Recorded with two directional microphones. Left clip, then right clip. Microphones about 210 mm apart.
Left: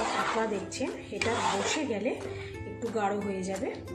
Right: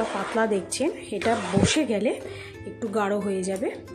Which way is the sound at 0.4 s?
50° right (ahead or behind).